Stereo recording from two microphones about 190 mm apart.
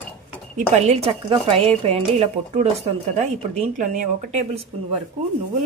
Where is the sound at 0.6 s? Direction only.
30° right (ahead or behind).